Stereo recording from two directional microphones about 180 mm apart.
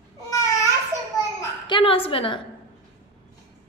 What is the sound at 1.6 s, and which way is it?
Speech, 30° left (ahead or behind).